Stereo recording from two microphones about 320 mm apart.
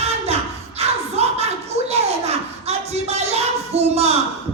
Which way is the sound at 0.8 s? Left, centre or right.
Centre.